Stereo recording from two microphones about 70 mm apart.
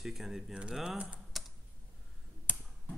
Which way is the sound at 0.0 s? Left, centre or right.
Centre.